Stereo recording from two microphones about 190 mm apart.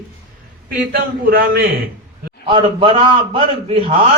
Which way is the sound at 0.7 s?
50° right (ahead or behind).